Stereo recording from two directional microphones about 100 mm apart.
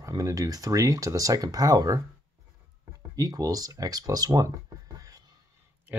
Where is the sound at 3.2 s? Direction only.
35° right (ahead or behind).